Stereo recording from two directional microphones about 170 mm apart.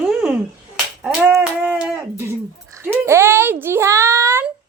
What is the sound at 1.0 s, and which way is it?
Dog, 10° right (ahead or behind).